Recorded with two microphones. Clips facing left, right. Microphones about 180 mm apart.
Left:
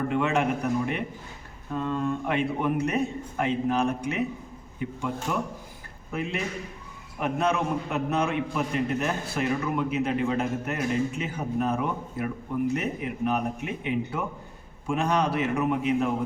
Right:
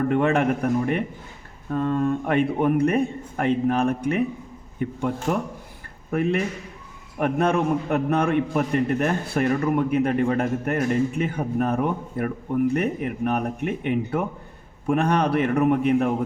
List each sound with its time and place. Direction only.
0.1 s a man's voice: 50° right (ahead or behind)